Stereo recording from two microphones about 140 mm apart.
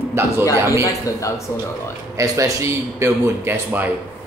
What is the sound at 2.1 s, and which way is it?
Speech, 20° right (ahead or behind).